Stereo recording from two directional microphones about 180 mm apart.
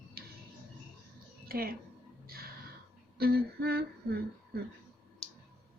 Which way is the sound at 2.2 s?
55° right (ahead or behind).